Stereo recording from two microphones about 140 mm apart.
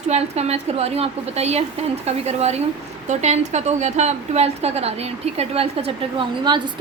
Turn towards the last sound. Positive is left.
turn(degrees=-35)  # may be behind; listen again after turning